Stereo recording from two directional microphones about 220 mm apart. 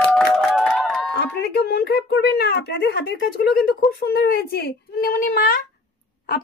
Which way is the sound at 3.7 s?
45° left (ahead or behind).